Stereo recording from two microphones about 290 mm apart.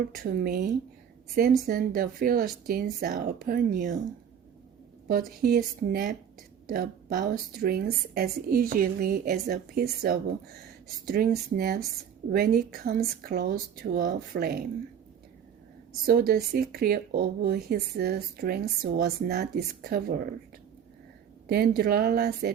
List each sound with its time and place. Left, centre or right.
0.2 s speech: right
5.0 s a woman's voice: right
16.0 s a woman's voice: right
21.4 s a woman's voice: right